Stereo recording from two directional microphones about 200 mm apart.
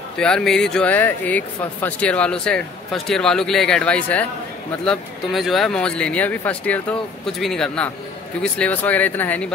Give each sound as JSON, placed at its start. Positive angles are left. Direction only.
{"t": 0.2, "sound": "speech", "side_deg": 5}